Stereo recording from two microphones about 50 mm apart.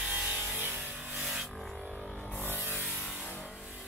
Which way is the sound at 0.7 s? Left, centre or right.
Centre.